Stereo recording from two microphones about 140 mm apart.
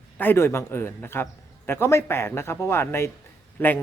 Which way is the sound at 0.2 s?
15° left (ahead or behind).